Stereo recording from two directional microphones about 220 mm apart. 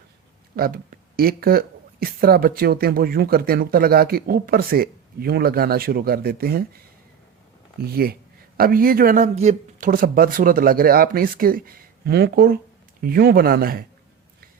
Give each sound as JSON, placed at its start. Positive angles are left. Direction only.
{"t": 0.5, "sound": "speech", "side_deg": -45}
{"t": 8.5, "sound": "speech", "side_deg": -40}